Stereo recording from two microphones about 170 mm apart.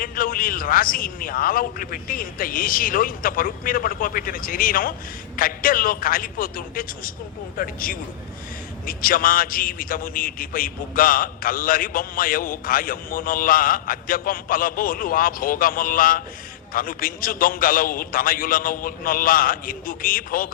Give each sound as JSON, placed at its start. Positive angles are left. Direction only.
{"t": 0.0, "sound": "a man's voice", "side_deg": 55}